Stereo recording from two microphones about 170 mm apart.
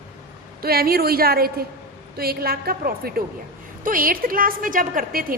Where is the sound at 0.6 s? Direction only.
65° right (ahead or behind).